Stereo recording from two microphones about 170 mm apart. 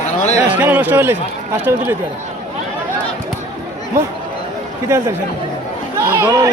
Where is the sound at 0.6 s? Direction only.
10° right (ahead or behind).